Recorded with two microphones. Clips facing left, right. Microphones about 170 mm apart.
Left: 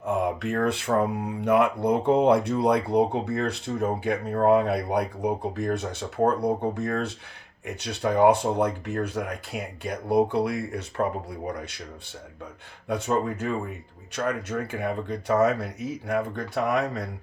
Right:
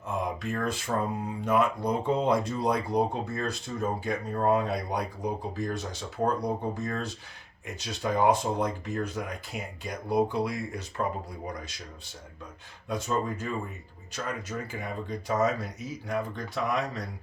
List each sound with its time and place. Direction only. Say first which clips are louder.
0.0 s speech: left 6 dB; 60° left (ahead or behind)
12.9 s speech: left 4 dB; 60° left (ahead or behind)